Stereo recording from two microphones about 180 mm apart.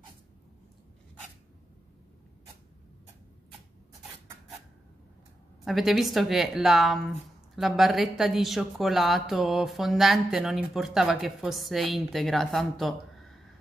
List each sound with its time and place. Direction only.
5.7 s a woman's voice: centre (ahead or behind)